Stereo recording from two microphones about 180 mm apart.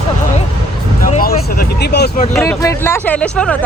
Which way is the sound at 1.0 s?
50° left (ahead or behind).